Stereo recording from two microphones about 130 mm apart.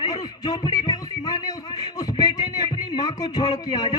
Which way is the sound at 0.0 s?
30° left (ahead or behind).